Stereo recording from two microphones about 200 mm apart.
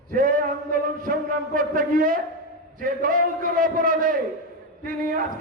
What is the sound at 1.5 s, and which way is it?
A man's voice, 45° right (ahead or behind).